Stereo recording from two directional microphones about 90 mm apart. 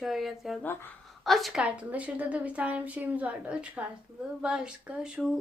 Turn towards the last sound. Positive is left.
turn(degrees=-10)  # may be behind; listen again after turning